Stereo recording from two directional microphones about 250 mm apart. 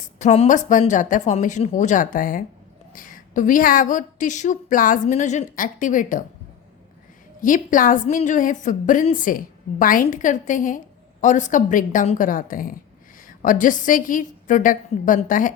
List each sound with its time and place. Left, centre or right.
0.2 s a woman's voice: left
7.4 s a woman's voice: left